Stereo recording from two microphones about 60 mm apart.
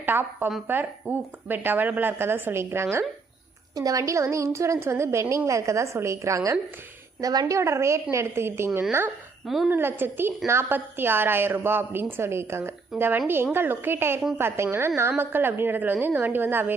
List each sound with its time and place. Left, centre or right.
0.0 s a woman's voice: right
3.8 s a woman's voice: right
7.2 s a woman's voice: right
10.4 s a woman's voice: right
10.7 s a woman's voice: right
13.0 s a woman's voice: right